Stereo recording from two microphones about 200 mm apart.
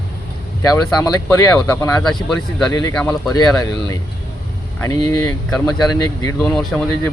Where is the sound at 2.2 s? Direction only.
Centre (ahead or behind).